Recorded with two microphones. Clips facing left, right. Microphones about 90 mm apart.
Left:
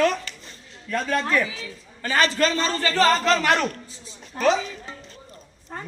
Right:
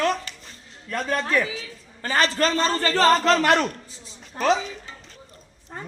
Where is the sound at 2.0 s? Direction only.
35° right (ahead or behind).